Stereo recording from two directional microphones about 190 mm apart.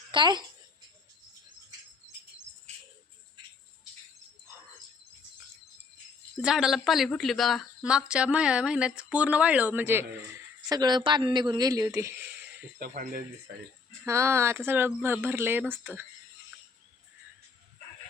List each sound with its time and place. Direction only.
0.1 s a child's voice: 25° right (ahead or behind)
6.4 s speech: 5° right (ahead or behind)
12.8 s speech: 50° right (ahead or behind)
14.0 s speech: 15° right (ahead or behind)